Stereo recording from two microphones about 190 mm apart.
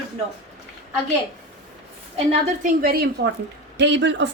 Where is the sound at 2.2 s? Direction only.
45° right (ahead or behind).